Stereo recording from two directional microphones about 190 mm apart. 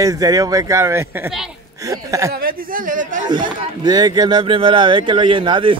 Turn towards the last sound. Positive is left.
turn(degrees=-25)  # may be behind; listen again after turning